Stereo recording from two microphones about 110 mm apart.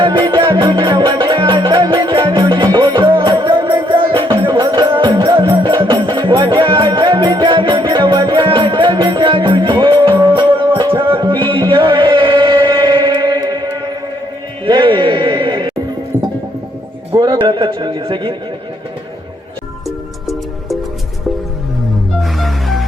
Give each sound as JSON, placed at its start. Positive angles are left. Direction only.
{"t": 0.0, "sound": "music", "side_deg": -45}
{"t": 17.2, "sound": "a sound", "side_deg": -45}
{"t": 22.2, "sound": "music", "side_deg": 0}